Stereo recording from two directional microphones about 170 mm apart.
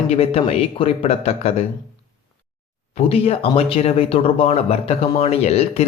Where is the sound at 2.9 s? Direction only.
35° left (ahead or behind).